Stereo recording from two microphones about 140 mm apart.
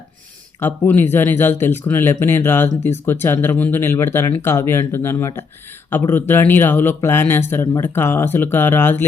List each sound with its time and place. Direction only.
0.6 s speech: 15° left (ahead or behind)